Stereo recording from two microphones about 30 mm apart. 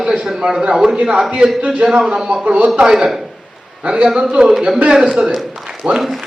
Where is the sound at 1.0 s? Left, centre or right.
Right.